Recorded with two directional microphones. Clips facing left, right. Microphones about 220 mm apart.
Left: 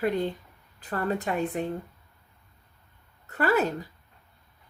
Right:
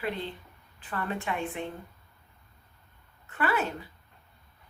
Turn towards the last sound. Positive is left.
turn(degrees=40)  # may be behind; listen again after turning